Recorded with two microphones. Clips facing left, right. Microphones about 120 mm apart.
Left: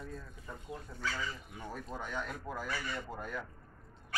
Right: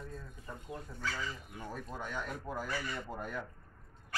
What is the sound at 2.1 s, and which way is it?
Speech, centre (ahead or behind).